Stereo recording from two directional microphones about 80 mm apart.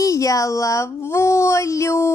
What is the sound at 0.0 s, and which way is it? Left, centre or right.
Speech, left.